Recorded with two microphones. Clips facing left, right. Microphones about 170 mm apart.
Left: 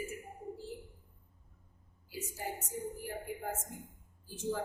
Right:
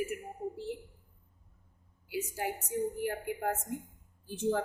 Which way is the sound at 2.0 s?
70° right (ahead or behind).